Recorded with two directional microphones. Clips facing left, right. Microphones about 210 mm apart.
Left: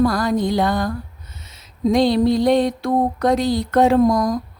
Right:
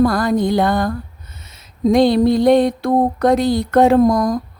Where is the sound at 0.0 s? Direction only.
50° right (ahead or behind).